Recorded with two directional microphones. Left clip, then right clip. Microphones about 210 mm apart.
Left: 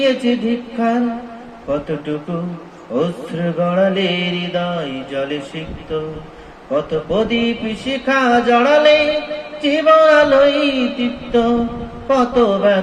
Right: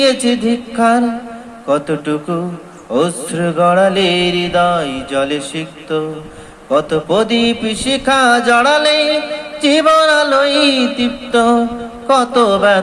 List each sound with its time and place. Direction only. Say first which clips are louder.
0.0 s mantra: right 3 dB; 20° right (ahead or behind)
2.9 s mantra: right 4 dB; 20° right (ahead or behind)